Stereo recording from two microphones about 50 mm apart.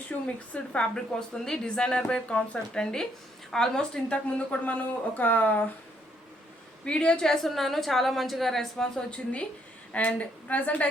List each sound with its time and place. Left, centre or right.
0.1 s a woman's voice: left
3.9 s speech: left
6.8 s a woman's voice: left